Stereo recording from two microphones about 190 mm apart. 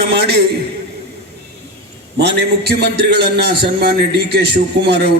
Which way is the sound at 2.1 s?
60° right (ahead or behind).